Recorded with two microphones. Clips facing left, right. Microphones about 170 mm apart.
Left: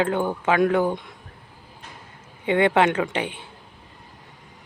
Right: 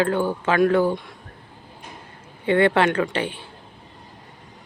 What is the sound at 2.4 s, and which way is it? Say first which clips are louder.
Speech: right 1 dB; 15° left (ahead or behind).